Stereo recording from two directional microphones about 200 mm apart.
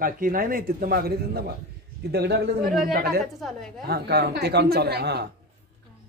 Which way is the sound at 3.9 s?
50° right (ahead or behind).